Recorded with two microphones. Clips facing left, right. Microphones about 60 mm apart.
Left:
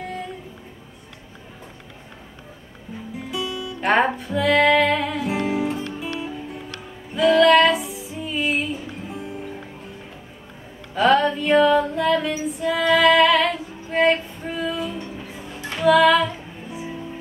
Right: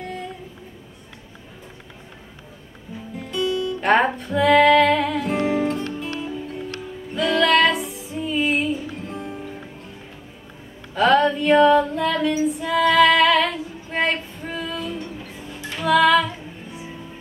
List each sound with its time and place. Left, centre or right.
3.3 s music: centre
7.2 s music: centre
11.0 s female singing: centre
15.8 s music: centre